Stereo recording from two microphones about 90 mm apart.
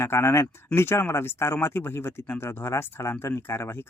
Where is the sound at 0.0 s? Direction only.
30° left (ahead or behind).